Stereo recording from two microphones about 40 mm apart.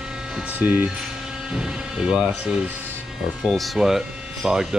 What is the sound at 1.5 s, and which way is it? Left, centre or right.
Speech, centre.